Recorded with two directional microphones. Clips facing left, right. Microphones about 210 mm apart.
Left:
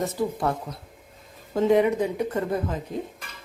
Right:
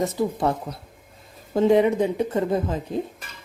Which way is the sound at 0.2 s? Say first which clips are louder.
Right 1 dB; 20° right (ahead or behind).